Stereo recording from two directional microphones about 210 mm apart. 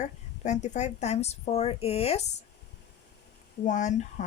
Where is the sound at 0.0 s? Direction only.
35° left (ahead or behind).